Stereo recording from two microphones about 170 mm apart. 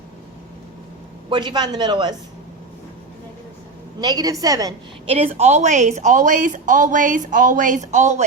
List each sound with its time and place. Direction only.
1.3 s speech: 25° right (ahead or behind)
4.0 s speech: 25° right (ahead or behind)
5.0 s a woman's voice: 35° right (ahead or behind)